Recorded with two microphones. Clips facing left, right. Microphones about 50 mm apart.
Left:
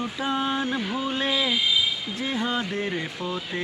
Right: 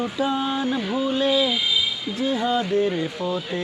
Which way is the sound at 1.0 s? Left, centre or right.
Left.